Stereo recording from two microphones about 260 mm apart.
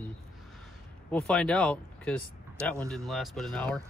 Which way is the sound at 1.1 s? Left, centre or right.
Centre.